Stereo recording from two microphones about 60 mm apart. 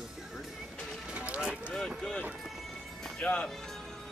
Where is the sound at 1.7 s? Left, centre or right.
Centre.